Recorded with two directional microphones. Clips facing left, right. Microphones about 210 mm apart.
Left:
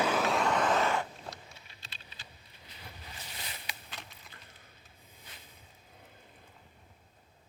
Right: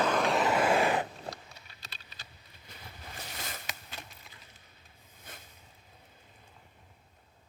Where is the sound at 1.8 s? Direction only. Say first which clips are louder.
Right 1 dB; 40° right (ahead or behind).